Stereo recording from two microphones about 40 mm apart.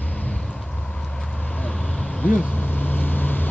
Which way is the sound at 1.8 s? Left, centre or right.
Centre.